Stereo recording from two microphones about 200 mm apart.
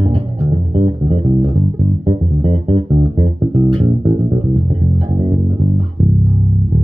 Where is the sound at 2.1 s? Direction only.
25° right (ahead or behind).